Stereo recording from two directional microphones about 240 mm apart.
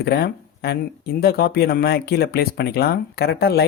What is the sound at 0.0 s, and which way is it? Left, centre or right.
Speech, left.